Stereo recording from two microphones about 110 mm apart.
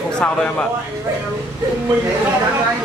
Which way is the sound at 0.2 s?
5° left (ahead or behind).